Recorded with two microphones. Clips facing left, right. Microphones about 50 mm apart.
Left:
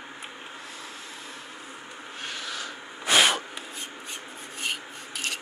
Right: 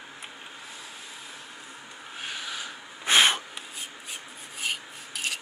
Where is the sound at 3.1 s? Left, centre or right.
Right.